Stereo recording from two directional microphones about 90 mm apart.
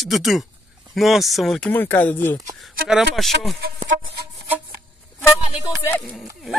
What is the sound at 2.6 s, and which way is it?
Speech, 5° right (ahead or behind).